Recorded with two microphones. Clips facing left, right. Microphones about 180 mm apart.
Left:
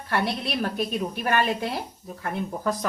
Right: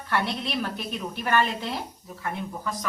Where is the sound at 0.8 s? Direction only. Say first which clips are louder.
Left 5 dB; 10° left (ahead or behind).